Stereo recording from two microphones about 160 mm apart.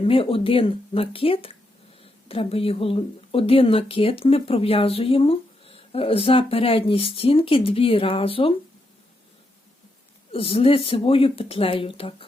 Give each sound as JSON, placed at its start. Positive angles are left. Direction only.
{"t": 0.0, "sound": "speech", "side_deg": 35}
{"t": 10.3, "sound": "speech", "side_deg": 35}